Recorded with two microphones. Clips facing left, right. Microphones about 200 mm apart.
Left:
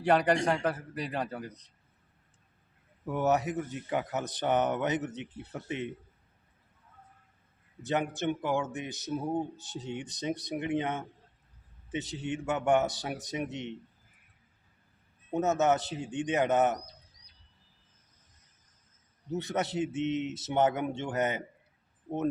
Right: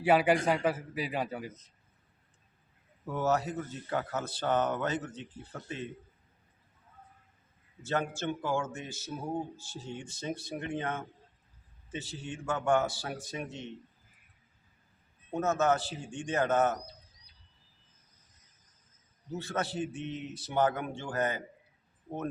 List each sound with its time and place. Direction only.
0.0 s a man's voice: 5° right (ahead or behind)
3.1 s speech: 15° left (ahead or behind)
7.8 s speech: 15° left (ahead or behind)
15.3 s speech: 20° left (ahead or behind)
19.3 s speech: 20° left (ahead or behind)